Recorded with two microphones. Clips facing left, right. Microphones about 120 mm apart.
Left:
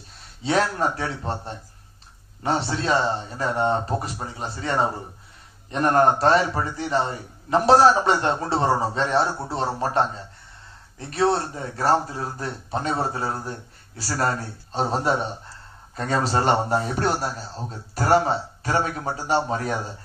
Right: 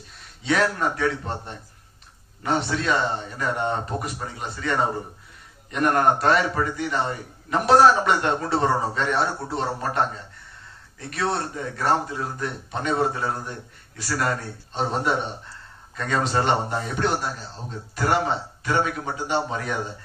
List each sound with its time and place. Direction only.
0.2 s a man's voice: 30° left (ahead or behind)